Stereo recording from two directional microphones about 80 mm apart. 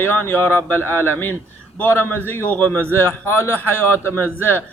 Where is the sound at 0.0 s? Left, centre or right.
Left.